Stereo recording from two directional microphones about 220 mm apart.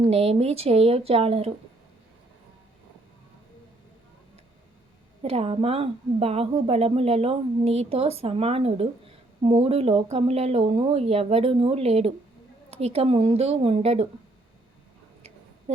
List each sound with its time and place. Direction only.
0.0 s a woman's voice: 30° right (ahead or behind)
5.2 s a woman's voice: 25° right (ahead or behind)